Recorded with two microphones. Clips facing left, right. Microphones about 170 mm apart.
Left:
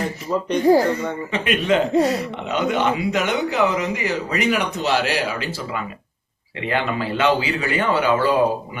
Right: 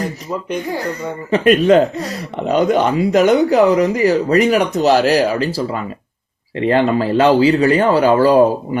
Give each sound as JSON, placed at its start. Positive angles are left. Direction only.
{"t": 0.5, "sound": "speech", "side_deg": 35}
{"t": 0.9, "sound": "speech", "side_deg": -40}